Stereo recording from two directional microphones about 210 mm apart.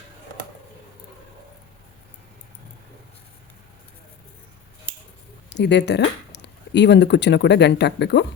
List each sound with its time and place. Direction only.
5.5 s speech: 55° left (ahead or behind)